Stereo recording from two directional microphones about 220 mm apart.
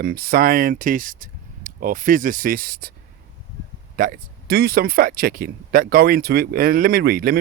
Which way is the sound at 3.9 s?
40° right (ahead or behind).